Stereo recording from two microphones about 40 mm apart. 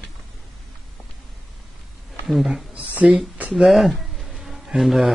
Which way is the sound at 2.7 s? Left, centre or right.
Right.